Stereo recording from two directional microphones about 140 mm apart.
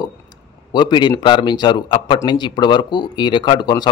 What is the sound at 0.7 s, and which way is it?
Speech, 30° left (ahead or behind).